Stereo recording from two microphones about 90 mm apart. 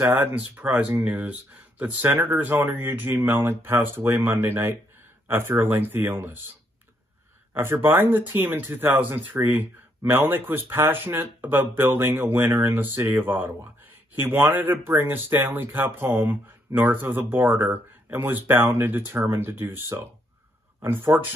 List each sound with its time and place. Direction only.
0.0 s speech: 20° right (ahead or behind)
7.5 s speech: 25° right (ahead or behind)